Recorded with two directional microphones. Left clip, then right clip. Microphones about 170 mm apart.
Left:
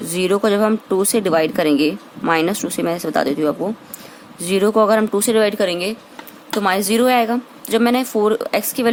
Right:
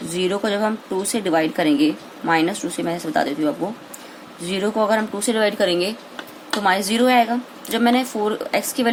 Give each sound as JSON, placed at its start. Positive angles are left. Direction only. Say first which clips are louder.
{"t": 0.1, "sound": "speech", "louder": "left 5 dB", "side_deg": 50}